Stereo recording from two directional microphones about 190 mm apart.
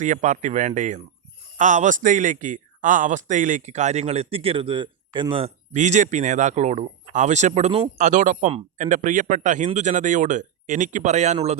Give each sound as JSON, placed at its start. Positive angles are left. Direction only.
{"t": 0.0, "sound": "speech", "side_deg": -40}
{"t": 5.7, "sound": "speech", "side_deg": -40}